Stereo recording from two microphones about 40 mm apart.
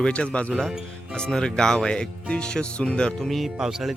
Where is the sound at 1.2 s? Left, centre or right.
Centre.